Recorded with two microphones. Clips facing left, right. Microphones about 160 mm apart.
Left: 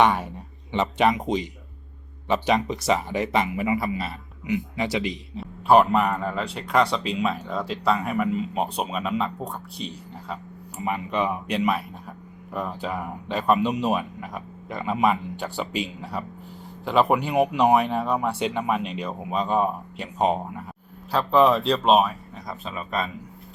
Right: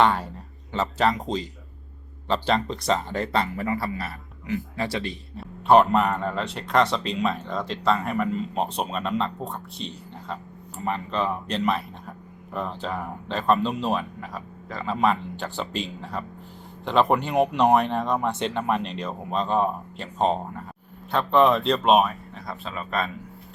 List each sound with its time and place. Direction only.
0.0 s speech: 15° left (ahead or behind)
2.2 s a man's voice: 15° left (ahead or behind)
4.8 s a man's voice: centre (ahead or behind)